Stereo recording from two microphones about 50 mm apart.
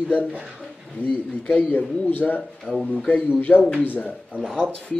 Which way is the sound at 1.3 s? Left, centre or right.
Left.